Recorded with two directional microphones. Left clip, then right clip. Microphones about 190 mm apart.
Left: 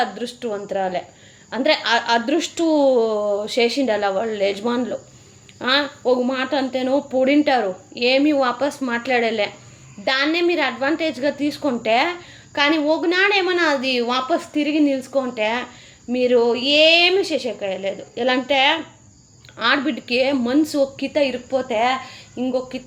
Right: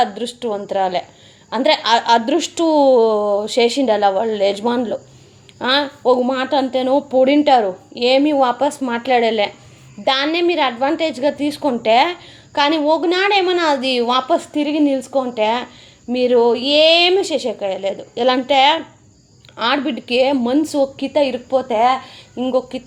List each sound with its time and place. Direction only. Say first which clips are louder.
0.0 s a woman's voice: right 5 dB; 25° right (ahead or behind)